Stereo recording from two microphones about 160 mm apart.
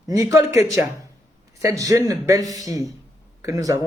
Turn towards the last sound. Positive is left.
turn(degrees=-20)  # may be behind; listen again after turning